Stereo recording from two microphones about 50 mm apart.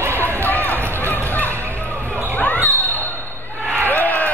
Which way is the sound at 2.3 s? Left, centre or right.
Left.